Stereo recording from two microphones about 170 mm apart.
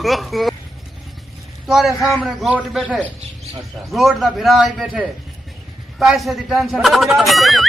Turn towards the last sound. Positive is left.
turn(degrees=0)  # may be behind; listen again after turning